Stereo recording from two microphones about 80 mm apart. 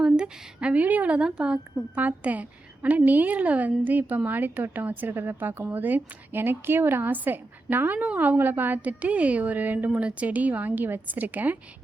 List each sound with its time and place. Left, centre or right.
0.0 s a woman's voice: centre